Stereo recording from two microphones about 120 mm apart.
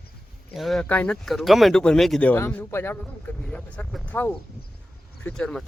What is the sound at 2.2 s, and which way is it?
A man's voice, 15° left (ahead or behind).